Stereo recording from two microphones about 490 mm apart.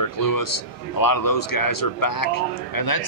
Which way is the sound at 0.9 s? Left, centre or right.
Left.